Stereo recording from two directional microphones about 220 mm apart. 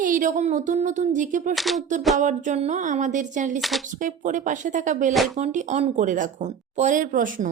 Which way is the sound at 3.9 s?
35° right (ahead or behind).